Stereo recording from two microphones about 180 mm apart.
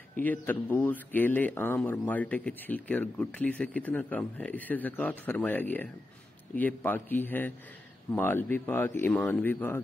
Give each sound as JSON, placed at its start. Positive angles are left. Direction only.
{"t": 0.2, "sound": "speech", "side_deg": 10}